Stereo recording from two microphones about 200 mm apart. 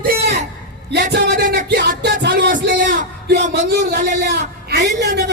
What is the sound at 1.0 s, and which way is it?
Music, 45° right (ahead or behind).